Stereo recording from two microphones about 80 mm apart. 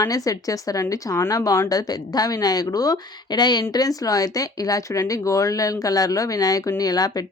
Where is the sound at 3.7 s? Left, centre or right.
Left.